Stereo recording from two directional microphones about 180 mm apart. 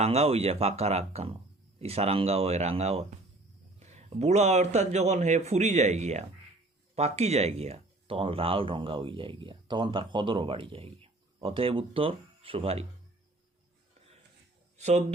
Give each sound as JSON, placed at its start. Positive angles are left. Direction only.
{"t": 0.0, "sound": "speech", "side_deg": -35}
{"t": 14.8, "sound": "speech", "side_deg": -40}